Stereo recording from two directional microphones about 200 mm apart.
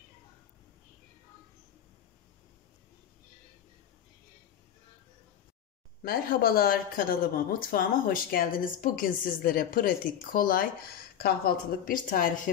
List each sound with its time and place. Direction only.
6.0 s speech: 50° left (ahead or behind)